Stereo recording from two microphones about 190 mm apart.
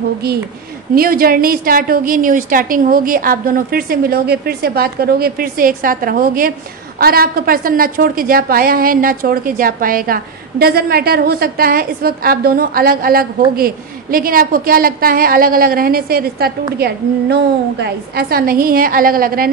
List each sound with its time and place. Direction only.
0.9 s a woman's voice: 50° right (ahead or behind)